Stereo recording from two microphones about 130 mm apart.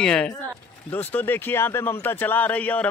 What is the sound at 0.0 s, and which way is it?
A man's voice, 5° left (ahead or behind).